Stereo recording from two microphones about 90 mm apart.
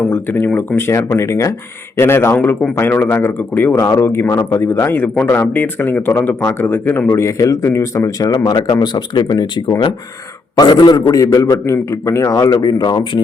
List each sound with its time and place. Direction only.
0.1 s a man's voice: 25° left (ahead or behind); by 13.2 s 50° left (ahead or behind)